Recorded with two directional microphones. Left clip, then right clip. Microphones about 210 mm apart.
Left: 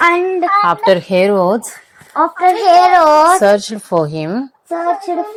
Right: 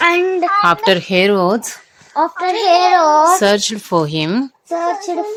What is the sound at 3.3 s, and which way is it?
A woman's voice, 10° right (ahead or behind).